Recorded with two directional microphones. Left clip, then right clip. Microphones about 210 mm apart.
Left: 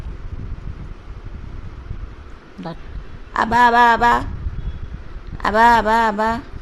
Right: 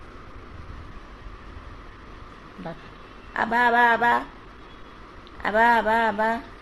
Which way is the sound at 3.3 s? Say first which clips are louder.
Left 7 dB; 50° left (ahead or behind).